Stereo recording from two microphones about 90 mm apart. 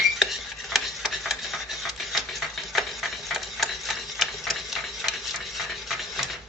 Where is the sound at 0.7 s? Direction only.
Centre (ahead or behind).